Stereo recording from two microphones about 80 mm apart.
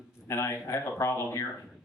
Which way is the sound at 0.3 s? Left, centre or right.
Left.